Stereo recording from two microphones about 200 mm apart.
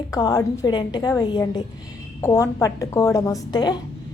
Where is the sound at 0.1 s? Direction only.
20° left (ahead or behind).